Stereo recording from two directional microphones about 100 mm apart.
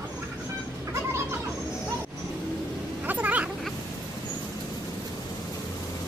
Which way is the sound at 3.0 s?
15° right (ahead or behind).